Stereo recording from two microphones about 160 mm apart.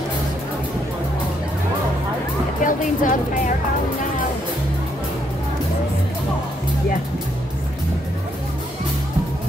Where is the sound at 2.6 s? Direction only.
55° left (ahead or behind).